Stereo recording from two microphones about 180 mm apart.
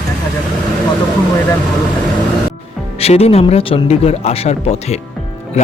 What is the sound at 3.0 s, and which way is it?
Speech, 35° left (ahead or behind).